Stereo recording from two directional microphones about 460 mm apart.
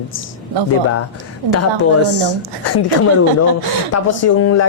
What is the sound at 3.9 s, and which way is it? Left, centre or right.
Speech, left.